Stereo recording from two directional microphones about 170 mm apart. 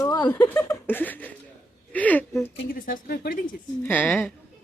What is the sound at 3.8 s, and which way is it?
Speech, 10° left (ahead or behind).